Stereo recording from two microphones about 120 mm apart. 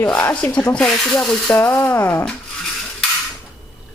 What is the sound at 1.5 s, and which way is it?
Speech, 20° left (ahead or behind).